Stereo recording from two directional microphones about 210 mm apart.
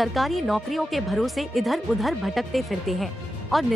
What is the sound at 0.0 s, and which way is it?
A woman's voice, centre (ahead or behind).